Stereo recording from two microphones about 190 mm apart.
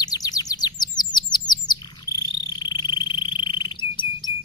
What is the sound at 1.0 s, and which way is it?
Chirp, 20° left (ahead or behind).